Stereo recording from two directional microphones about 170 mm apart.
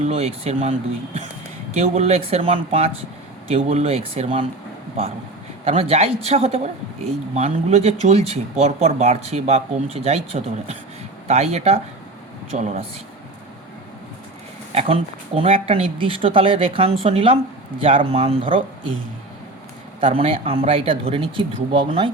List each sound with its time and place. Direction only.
0.0 s a woman's voice: 40° right (ahead or behind)
5.6 s a woman's voice: 35° right (ahead or behind)
15.4 s a woman's voice: 35° right (ahead or behind)
20.0 s a woman's voice: 30° right (ahead or behind)